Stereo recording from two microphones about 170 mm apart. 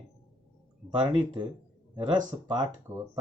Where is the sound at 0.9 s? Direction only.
25° right (ahead or behind).